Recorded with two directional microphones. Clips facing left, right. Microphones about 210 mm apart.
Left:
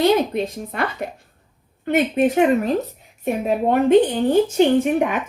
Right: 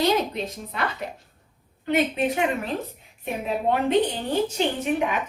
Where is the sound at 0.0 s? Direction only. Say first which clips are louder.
Left 6 dB; 50° left (ahead or behind).